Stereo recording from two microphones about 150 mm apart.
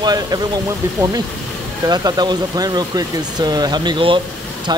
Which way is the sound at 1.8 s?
30° right (ahead or behind).